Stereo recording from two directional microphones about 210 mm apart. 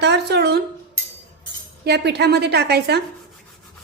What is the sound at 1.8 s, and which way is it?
A woman's voice, 50° right (ahead or behind).